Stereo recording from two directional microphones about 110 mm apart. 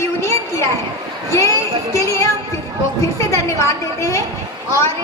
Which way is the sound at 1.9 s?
25° left (ahead or behind).